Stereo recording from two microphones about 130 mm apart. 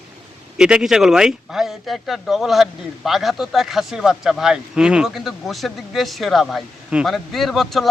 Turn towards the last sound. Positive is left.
turn(degrees=0)  # may be behind; listen again after turning